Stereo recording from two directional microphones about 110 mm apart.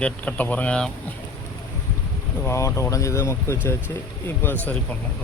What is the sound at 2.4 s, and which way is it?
Speech, 25° left (ahead or behind).